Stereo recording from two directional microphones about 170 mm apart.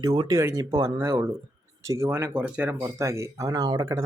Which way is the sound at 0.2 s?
20° right (ahead or behind).